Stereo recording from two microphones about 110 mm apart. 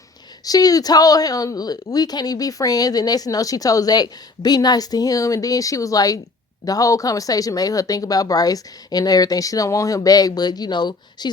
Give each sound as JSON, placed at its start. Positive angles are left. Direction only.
{"t": 0.4, "sound": "speech", "side_deg": 35}